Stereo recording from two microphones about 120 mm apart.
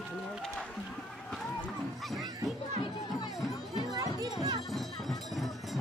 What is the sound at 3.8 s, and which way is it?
Music, 30° right (ahead or behind).